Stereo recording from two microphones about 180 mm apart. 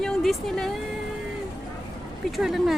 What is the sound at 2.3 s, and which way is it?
Speech, centre (ahead or behind).